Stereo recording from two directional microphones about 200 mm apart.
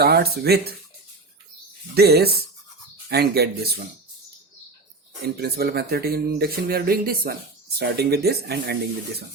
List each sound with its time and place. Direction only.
0.0 s speech: 50° right (ahead or behind)
2.0 s speech: 50° right (ahead or behind)
5.2 s speech: 50° right (ahead or behind)